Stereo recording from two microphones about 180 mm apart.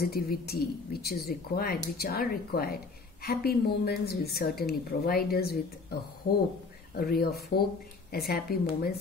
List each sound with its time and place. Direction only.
0.0 s speech: 60° left (ahead or behind)
7.0 s speech: 55° left (ahead or behind)